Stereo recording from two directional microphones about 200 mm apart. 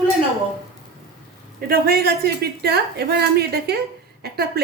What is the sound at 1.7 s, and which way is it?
A woman's voice, 50° right (ahead or behind).